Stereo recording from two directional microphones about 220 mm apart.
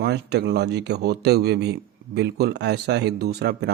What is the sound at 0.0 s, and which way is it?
Speech, 50° right (ahead or behind).